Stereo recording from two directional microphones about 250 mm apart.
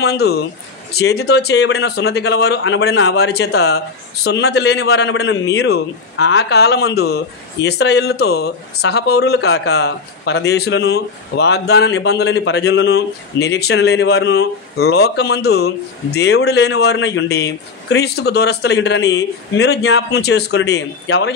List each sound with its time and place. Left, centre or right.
0.0 s speech: left